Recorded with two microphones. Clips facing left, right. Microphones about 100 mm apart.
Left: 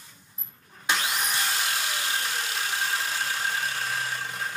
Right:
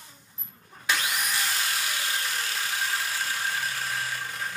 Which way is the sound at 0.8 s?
25° left (ahead or behind).